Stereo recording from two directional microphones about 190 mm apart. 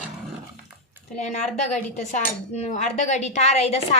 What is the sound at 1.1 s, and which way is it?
Cutlery, 35° left (ahead or behind).